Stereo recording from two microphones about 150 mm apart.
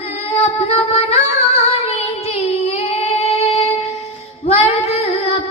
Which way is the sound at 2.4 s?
45° left (ahead or behind).